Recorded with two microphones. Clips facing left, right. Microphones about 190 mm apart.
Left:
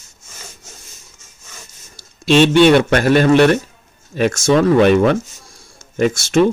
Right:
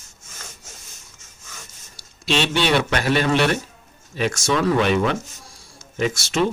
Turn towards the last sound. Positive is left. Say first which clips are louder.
# left 7 dB
turn(degrees=50)  # may be behind; listen again after turning